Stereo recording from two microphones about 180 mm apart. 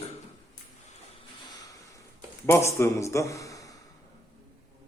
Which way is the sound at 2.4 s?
15° left (ahead or behind).